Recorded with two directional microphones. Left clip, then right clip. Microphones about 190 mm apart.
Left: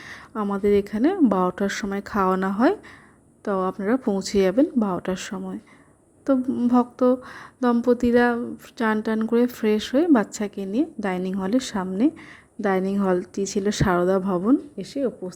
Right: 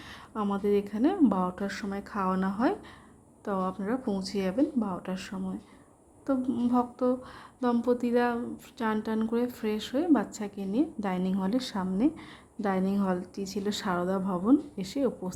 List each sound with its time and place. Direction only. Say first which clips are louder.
0.5 s a woman's voice: left 8 dB; 25° left (ahead or behind)
6.4 s speech: left 5 dB; 10° left (ahead or behind)
6.7 s a woman's voice: left 8 dB; 25° left (ahead or behind)
14.8 s speech: left 4 dB; 10° left (ahead or behind)